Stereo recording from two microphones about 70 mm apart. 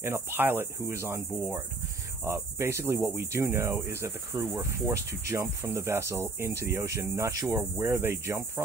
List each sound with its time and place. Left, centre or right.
0.0 s cricket: right
2.2 s cricket: right
4.6 s insect: right
7.8 s cricket: right